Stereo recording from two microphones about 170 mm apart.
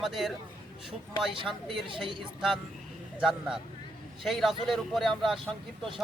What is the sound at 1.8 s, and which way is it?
Speech, 30° right (ahead or behind).